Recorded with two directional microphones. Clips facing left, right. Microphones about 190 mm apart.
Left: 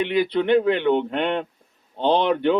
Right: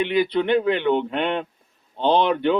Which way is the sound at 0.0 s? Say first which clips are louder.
Even; 50° left (ahead or behind).